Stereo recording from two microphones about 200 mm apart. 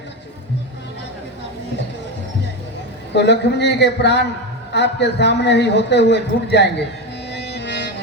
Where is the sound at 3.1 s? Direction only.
60° left (ahead or behind).